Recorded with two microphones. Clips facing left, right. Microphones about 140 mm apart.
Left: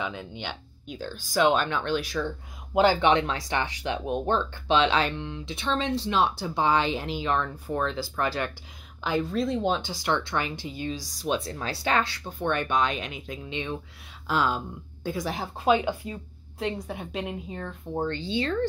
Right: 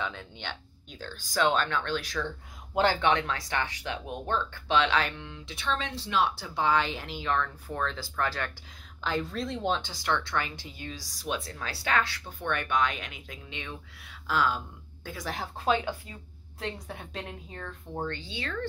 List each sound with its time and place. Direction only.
0.0 s a woman's voice: 10° left (ahead or behind); by 18.7 s 30° left (ahead or behind)